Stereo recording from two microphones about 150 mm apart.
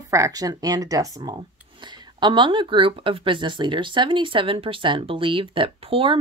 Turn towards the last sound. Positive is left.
turn(degrees=-35)  # may be behind; listen again after turning